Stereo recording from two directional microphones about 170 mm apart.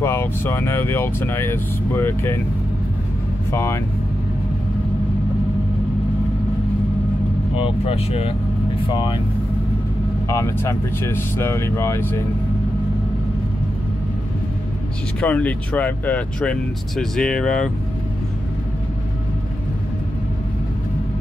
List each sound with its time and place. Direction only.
0.0 s speech: 15° left (ahead or behind)
3.5 s speech: 15° left (ahead or behind)
7.5 s speech: 35° left (ahead or behind)
10.2 s speech: 15° left (ahead or behind)
15.1 s speech: 10° left (ahead or behind)